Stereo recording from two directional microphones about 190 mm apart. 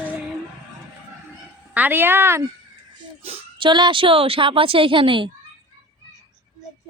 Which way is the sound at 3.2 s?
30° right (ahead or behind).